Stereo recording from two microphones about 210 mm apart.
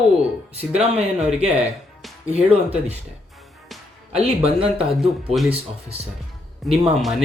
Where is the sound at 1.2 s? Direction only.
5° right (ahead or behind).